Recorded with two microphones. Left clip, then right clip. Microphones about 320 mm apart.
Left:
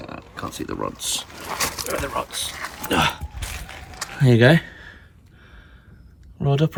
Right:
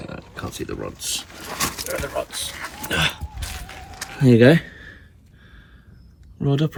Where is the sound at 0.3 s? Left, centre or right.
Centre.